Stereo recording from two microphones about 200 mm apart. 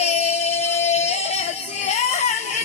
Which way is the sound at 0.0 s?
35° left (ahead or behind).